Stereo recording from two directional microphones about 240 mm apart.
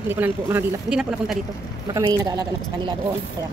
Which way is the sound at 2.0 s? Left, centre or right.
Centre.